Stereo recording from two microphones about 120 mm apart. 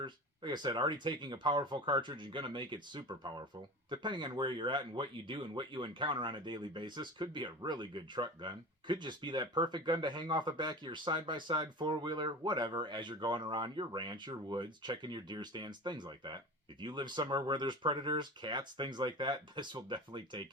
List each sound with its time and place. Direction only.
0.0 s speech: 40° right (ahead or behind)